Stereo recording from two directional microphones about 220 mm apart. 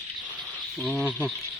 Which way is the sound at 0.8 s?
Centre (ahead or behind).